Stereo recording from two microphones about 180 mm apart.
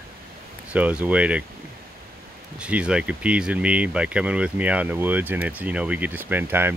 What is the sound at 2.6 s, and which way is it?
Speech, 5° right (ahead or behind).